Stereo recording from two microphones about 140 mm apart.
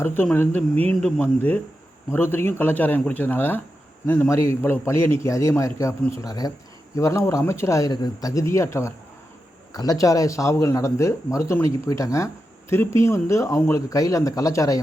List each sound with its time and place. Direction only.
0.0 s speech: 15° left (ahead or behind)